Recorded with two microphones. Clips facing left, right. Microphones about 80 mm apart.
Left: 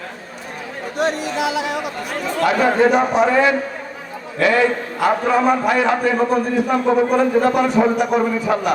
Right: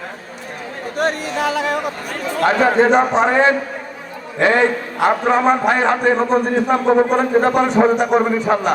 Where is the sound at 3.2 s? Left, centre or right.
Right.